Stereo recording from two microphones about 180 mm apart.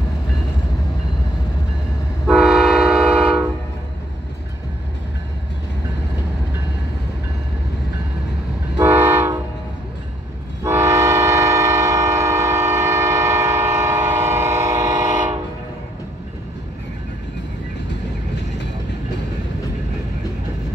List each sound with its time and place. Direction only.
2.2 s train: centre (ahead or behind)
8.7 s train: 10° right (ahead or behind)
10.6 s train: 15° right (ahead or behind)